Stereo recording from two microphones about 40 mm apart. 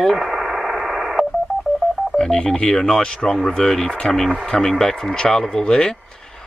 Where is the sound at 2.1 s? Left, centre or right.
Centre.